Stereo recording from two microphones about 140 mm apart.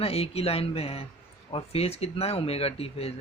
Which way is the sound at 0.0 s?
45° left (ahead or behind).